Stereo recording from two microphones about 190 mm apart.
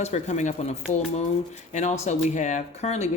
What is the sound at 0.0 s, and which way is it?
Speech, 35° left (ahead or behind).